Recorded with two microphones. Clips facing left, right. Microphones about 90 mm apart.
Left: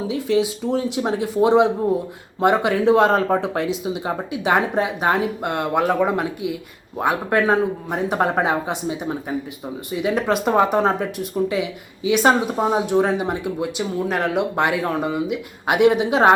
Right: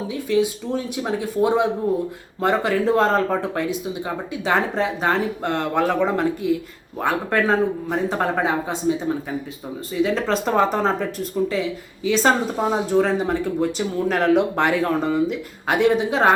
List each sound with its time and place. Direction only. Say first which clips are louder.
0.1 s speech: even; 20° left (ahead or behind)